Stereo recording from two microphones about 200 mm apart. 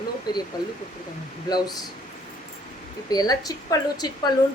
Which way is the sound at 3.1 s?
20° left (ahead or behind).